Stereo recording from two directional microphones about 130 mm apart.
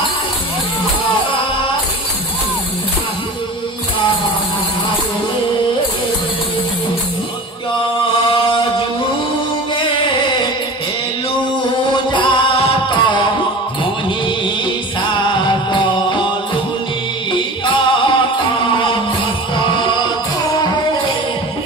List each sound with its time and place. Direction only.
11.9 s music: 40° left (ahead or behind)
15.0 s music: 40° left (ahead or behind)
17.3 s music: 40° left (ahead or behind)